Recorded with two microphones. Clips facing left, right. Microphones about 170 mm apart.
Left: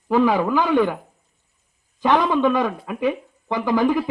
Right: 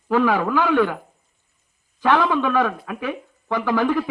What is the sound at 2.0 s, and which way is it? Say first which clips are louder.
Speech: left 1 dB; 15° left (ahead or behind).